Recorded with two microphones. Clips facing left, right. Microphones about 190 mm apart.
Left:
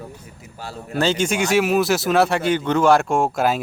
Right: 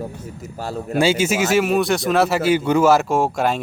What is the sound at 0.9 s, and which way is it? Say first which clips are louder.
A man's voice: right 2 dB; 10° right (ahead or behind).